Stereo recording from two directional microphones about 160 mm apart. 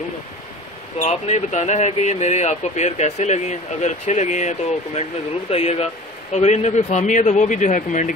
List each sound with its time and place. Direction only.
1.0 s speech: 45° left (ahead or behind)